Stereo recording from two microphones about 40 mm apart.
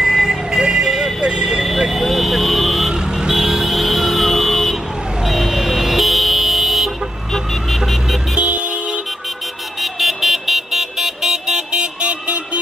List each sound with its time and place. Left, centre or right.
0.0 s vehicle: centre
1.6 s vehicle: centre
2.9 s vehicle: centre
8.4 s vehicle: right
9.8 s vehicle: centre
11.7 s vehicle: right